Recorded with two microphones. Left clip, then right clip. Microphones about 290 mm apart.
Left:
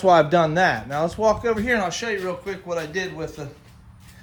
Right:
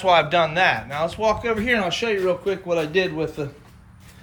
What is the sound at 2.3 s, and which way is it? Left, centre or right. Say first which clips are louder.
Speech: right 6 dB; centre.